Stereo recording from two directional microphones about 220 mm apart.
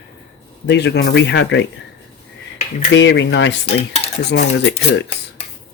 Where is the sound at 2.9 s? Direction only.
55° left (ahead or behind).